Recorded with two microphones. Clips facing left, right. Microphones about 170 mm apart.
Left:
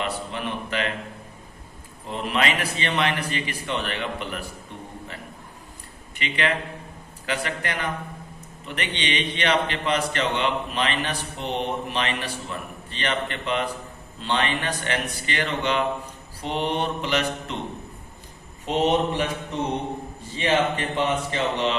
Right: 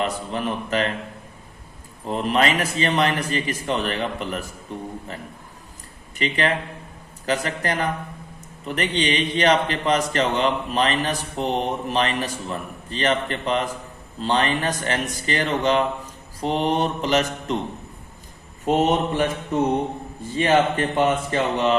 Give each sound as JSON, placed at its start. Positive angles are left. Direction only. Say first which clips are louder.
{"t": 0.0, "sound": "a man's voice", "louder": "right 4 dB", "side_deg": -40}
{"t": 2.0, "sound": "a man's voice", "louder": "right 4 dB", "side_deg": -40}
{"t": 6.1, "sound": "a man's voice", "louder": "right 3 dB", "side_deg": -35}
{"t": 18.6, "sound": "speech", "louder": "right 2 dB", "side_deg": -50}
{"t": 20.3, "sound": "speech", "louder": "right 4 dB", "side_deg": -50}